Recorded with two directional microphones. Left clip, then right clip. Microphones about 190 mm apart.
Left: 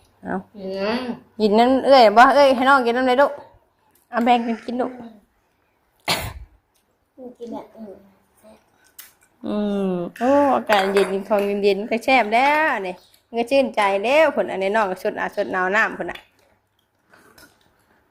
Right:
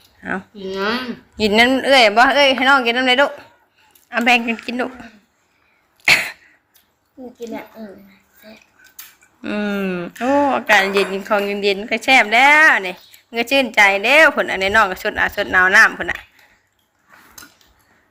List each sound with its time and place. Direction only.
0.5 s speech: 50° right (ahead or behind)
1.4 s a woman's voice: 10° left (ahead or behind)
4.3 s a woman's voice: 10° left (ahead or behind)
6.0 s a sound: 15° left (ahead or behind)
9.4 s speech: 10° left (ahead or behind)
9.6 s speech: 20° right (ahead or behind)
10.2 s speech: 5° right (ahead or behind)
10.7 s a woman's voice: 15° left (ahead or behind)